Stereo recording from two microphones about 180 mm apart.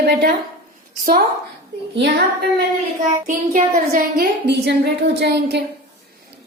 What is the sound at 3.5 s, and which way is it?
Speech, 45° right (ahead or behind).